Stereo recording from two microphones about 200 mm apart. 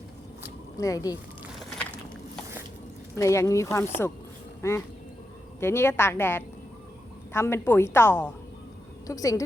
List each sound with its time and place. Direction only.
0.8 s speech: 15° left (ahead or behind)
3.2 s speech: 15° left (ahead or behind)